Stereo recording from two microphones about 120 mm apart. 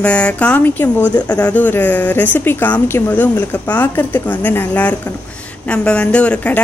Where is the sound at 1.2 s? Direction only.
30° left (ahead or behind).